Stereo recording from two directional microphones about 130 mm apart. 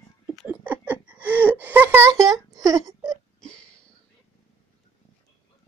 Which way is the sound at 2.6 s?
25° right (ahead or behind).